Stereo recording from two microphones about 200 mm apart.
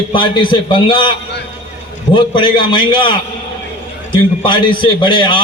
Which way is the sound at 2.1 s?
25° left (ahead or behind).